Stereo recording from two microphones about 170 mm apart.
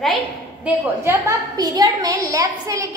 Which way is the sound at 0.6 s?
15° right (ahead or behind).